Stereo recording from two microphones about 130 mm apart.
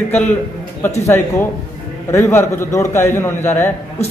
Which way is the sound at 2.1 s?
15° left (ahead or behind).